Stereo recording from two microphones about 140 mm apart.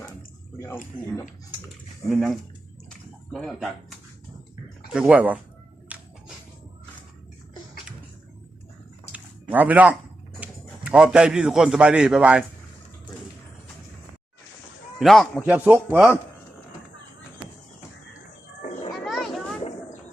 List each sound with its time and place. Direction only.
0.9 s speech: 40° left (ahead or behind)
2.0 s speech: centre (ahead or behind)
5.9 s music: 10° right (ahead or behind)
9.1 s a sound: 10° right (ahead or behind)
10.4 s a man's voice: 5° right (ahead or behind)
14.9 s a man's voice: centre (ahead or behind)
15.4 s speech: 10° right (ahead or behind)
18.6 s children playing: 55° left (ahead or behind)
19.0 s a sound: centre (ahead or behind)